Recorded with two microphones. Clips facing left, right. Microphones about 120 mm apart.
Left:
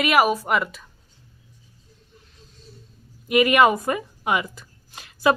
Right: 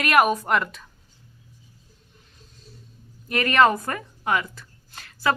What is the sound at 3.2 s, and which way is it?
Speech, 10° left (ahead or behind).